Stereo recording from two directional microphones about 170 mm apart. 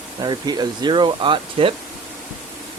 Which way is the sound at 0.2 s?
25° right (ahead or behind).